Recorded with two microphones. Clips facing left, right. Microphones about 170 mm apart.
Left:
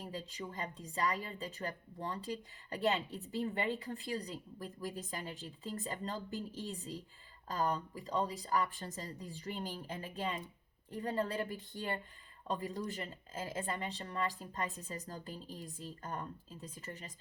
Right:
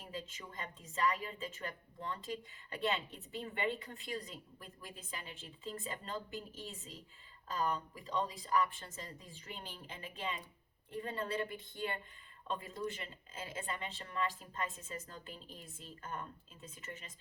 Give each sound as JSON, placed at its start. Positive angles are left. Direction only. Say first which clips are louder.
{"t": 0.0, "sound": "a woman's voice", "louder": "left 3 dB", "side_deg": 40}